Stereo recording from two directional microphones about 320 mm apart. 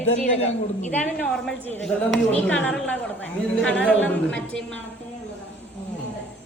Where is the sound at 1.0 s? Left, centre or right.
Centre.